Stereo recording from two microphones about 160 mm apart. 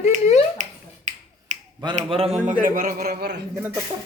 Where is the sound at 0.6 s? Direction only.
50° right (ahead or behind).